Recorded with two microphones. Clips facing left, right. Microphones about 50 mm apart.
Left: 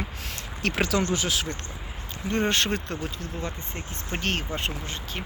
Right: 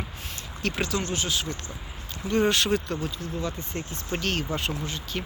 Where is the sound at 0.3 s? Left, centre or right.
Left.